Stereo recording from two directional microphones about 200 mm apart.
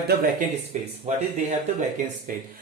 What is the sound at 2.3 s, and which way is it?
Speech, 45° right (ahead or behind).